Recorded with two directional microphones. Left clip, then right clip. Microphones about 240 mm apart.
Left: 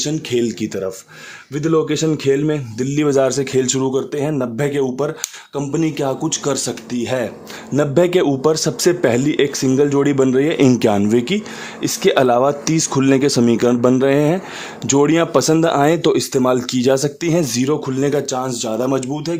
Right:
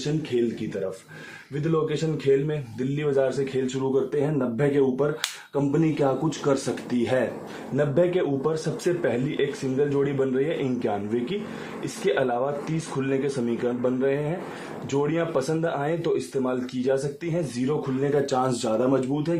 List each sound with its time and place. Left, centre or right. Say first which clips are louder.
1.6 s speech: left 9 dB; left
7.8 s a man's voice: left 8 dB; left
18.3 s speech: left 3 dB; left